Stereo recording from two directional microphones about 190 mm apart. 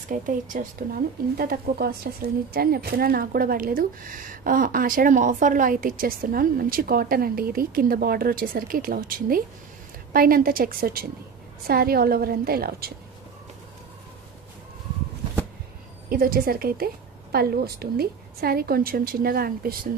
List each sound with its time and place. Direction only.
0.1 s speech: 45° right (ahead or behind)
16.1 s speech: 50° right (ahead or behind)